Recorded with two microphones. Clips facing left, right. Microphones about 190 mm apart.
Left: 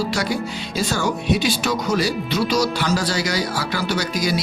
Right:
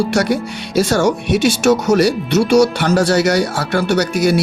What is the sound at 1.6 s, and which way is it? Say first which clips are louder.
A man's voice: right 12 dB; 70° right (ahead or behind).